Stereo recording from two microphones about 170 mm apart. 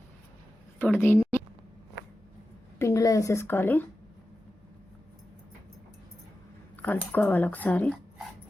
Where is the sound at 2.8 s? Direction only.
20° left (ahead or behind).